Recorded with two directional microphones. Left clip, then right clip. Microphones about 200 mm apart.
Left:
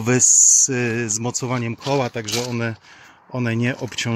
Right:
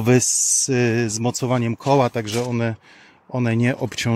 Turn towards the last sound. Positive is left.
turn(degrees=-30)  # may be behind; listen again after turning